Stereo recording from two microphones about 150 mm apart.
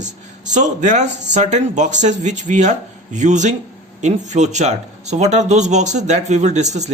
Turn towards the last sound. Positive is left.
turn(degrees=-50)  # may be behind; listen again after turning